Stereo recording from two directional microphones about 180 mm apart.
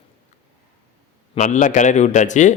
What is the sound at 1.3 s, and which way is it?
Speech, 40° left (ahead or behind).